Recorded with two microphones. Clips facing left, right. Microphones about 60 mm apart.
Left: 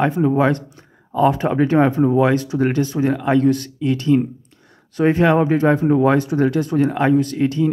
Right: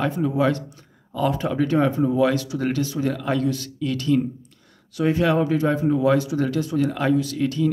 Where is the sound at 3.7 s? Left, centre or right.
Left.